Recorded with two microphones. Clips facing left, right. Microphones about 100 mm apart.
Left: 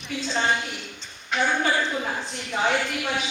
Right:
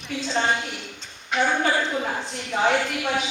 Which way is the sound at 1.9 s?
20° right (ahead or behind).